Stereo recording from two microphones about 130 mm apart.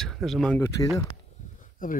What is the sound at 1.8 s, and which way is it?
Speech, 90° left.